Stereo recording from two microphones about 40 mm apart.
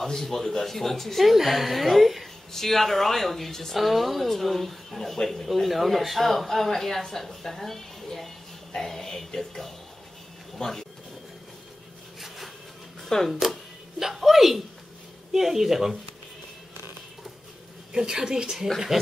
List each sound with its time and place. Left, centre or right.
0.0 s speech: centre
13.3 s speech: centre
17.9 s a woman's voice: centre